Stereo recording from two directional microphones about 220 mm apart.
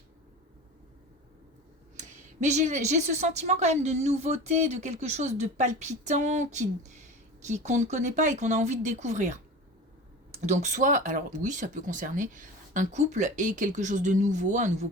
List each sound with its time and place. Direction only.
2.0 s a woman's voice: 30° right (ahead or behind)
10.4 s a woman's voice: 30° right (ahead or behind)